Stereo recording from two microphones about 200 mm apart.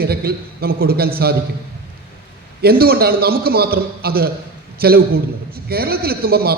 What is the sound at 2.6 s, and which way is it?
A man's voice, 50° right (ahead or behind).